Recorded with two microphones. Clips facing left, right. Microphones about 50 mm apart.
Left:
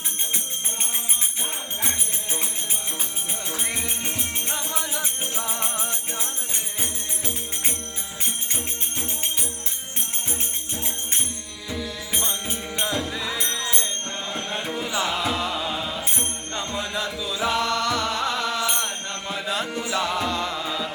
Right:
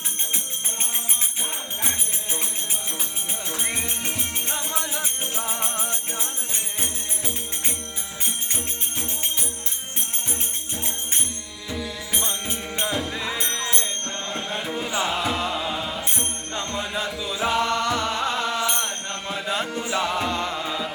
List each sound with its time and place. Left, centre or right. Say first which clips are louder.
1.8 s music: even; centre
3.7 s music: right 1 dB; centre
4.8 s music: even; right
5.6 s music: even; centre
12.1 s music: even; centre
14.3 s music: even; centre
17.2 s music: right 1 dB; centre
18.7 s mantra: even; centre
19.3 s mantra: right 1 dB; centre
19.8 s music: even; centre